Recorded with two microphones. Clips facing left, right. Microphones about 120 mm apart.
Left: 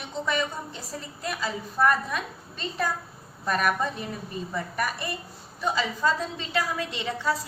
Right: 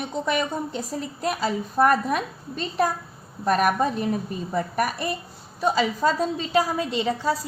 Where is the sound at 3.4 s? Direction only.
45° right (ahead or behind).